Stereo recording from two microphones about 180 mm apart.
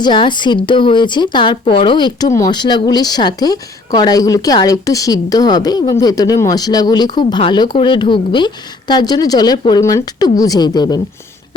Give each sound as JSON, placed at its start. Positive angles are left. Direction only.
{"t": 0.0, "sound": "speech", "side_deg": 25}